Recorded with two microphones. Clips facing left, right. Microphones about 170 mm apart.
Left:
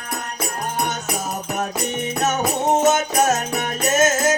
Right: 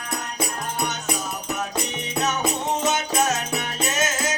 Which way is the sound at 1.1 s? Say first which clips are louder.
Left 3 dB; 50° left (ahead or behind).